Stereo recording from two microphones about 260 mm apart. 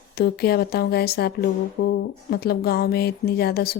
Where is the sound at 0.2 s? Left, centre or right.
Left.